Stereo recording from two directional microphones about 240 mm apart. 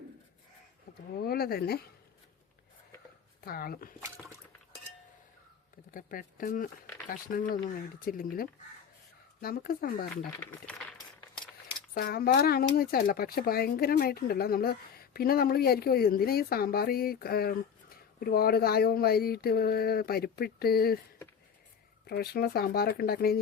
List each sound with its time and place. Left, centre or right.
1.2 s speech: left
3.4 s speech: left
5.9 s speech: left
10.4 s speech: centre
11.9 s speech: left
22.0 s speech: left